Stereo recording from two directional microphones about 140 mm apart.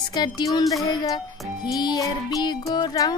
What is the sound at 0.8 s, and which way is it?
Music, 25° left (ahead or behind).